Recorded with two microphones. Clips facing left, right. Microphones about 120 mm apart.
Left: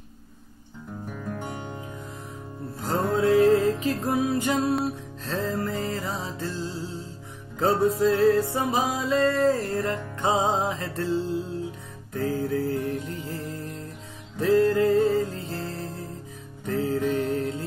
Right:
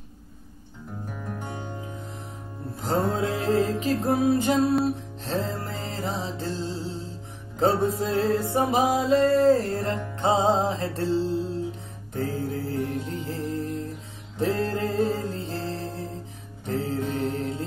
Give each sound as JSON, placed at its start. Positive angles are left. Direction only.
{"t": 2.8, "sound": "music", "side_deg": -25}